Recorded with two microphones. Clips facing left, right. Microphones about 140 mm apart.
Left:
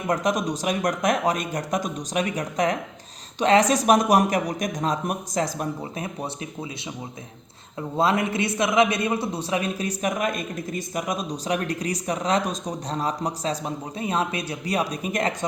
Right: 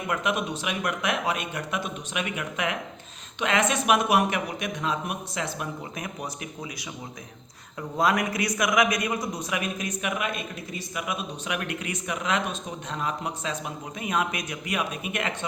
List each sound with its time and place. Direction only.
0.1 s a man's voice: 40° left (ahead or behind)
7.8 s a man's voice: 25° left (ahead or behind)